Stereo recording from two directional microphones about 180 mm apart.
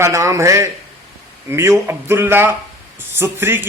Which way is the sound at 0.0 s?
15° right (ahead or behind).